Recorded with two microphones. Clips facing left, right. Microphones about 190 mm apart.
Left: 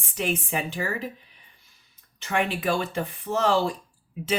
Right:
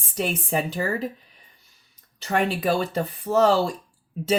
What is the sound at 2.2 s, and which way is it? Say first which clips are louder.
Speech: right 3 dB; 40° right (ahead or behind).